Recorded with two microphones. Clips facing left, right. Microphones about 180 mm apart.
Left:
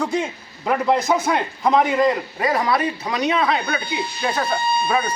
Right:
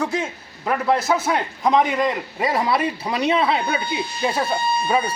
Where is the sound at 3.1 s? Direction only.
30° right (ahead or behind).